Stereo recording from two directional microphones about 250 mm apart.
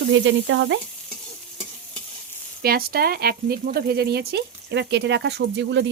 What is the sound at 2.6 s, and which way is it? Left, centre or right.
Speech, right.